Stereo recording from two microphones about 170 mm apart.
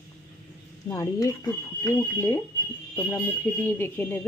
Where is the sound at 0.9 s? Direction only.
15° left (ahead or behind).